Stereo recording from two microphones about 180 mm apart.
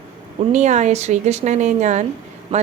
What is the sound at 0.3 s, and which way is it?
A woman's voice, 40° right (ahead or behind).